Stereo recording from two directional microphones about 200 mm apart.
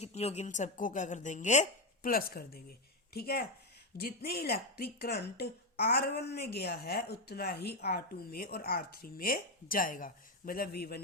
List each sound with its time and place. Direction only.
0.0 s speech: 30° left (ahead or behind); by 11.0 s 50° left (ahead or behind)